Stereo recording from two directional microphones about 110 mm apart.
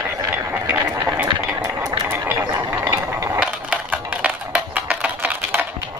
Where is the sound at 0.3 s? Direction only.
20° right (ahead or behind).